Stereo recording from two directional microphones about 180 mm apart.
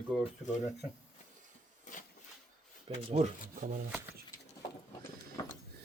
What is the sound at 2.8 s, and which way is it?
Speech, 35° right (ahead or behind).